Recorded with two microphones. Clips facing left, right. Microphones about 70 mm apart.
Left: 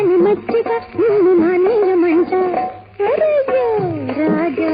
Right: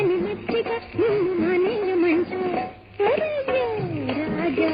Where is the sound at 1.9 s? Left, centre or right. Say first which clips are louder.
Left 8 dB; left.